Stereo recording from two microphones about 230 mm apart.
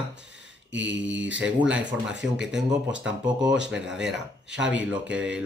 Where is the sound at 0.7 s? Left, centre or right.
Right.